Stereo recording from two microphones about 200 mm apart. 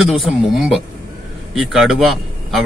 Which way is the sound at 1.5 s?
Centre (ahead or behind).